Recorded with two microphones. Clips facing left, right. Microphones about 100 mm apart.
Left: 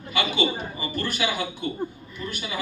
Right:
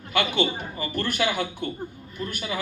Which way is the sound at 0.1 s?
55° right (ahead or behind).